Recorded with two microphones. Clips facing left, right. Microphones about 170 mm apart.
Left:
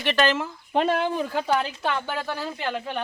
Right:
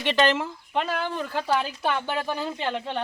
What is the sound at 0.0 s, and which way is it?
Speech, 15° right (ahead or behind).